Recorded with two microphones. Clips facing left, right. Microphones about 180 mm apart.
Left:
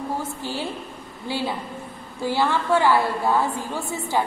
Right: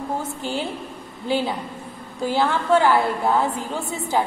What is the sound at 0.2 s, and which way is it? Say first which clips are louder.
A woman's voice: right 2 dB; 20° right (ahead or behind).